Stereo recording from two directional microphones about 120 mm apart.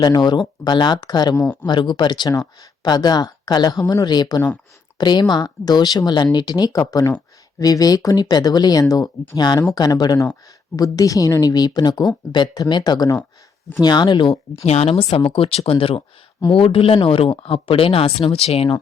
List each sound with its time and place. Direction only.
0.0 s speech: 35° left (ahead or behind)
14.6 s speech: 60° left (ahead or behind)